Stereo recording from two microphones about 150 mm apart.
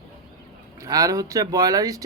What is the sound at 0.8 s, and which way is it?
A man's voice, 25° right (ahead or behind).